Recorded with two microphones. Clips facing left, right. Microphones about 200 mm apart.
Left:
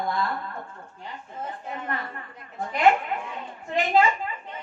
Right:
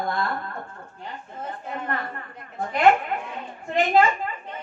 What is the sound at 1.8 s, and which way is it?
A woman's voice, 55° right (ahead or behind).